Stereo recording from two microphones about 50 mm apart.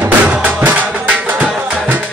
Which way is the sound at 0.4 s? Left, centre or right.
Right.